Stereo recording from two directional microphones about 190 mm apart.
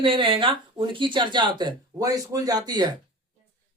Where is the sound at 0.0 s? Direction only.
25° right (ahead or behind).